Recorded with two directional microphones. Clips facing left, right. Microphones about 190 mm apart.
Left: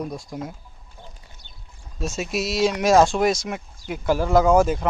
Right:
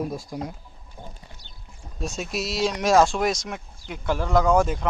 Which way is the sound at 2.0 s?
Centre (ahead or behind).